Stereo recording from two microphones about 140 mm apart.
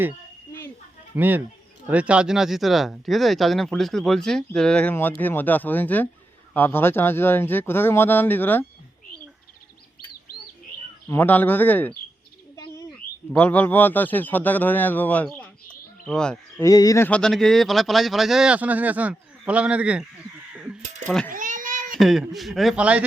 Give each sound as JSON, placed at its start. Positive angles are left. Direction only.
{"t": 1.1, "sound": "speech", "side_deg": -15}
{"t": 11.1, "sound": "speech", "side_deg": 15}
{"t": 13.3, "sound": "speech", "side_deg": 10}
{"t": 16.6, "sound": "speech", "side_deg": 25}
{"t": 17.1, "sound": "speech", "side_deg": 5}
{"t": 20.5, "sound": "crow", "side_deg": -10}
{"t": 21.2, "sound": "a sound", "side_deg": -70}
{"t": 21.9, "sound": "speech", "side_deg": 0}